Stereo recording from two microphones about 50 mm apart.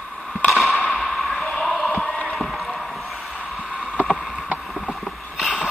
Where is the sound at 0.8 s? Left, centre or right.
Centre.